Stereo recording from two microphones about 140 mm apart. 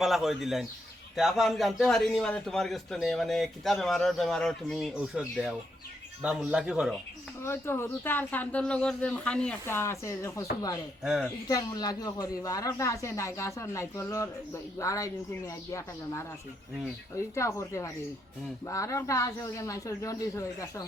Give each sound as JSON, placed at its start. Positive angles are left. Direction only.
{"t": 0.0, "sound": "a man's voice", "side_deg": 0}
{"t": 7.4, "sound": "speech", "side_deg": 20}
{"t": 9.6, "sound": "speech", "side_deg": 20}
{"t": 11.0, "sound": "a man's voice", "side_deg": -5}
{"t": 11.4, "sound": "speech", "side_deg": 25}